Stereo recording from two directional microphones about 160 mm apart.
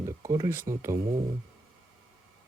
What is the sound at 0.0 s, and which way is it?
Speech, 20° right (ahead or behind).